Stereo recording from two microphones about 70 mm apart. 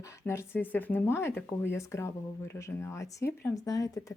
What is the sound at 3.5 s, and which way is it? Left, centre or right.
Speech, left.